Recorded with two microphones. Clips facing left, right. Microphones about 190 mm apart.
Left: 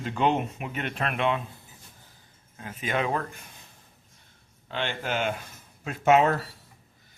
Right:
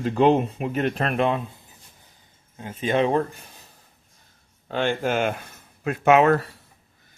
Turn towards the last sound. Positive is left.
turn(degrees=-60)  # may be behind; listen again after turning